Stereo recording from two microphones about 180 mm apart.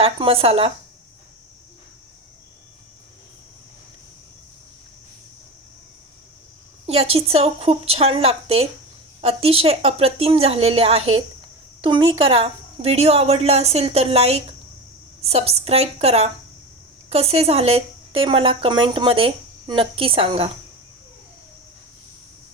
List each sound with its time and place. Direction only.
0.0 s a woman's voice: 30° right (ahead or behind)
6.8 s a woman's voice: 35° right (ahead or behind)